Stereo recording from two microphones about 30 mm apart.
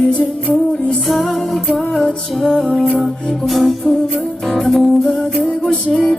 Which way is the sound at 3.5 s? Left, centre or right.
Centre.